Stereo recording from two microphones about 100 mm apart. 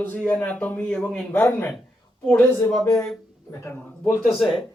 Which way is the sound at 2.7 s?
5° left (ahead or behind).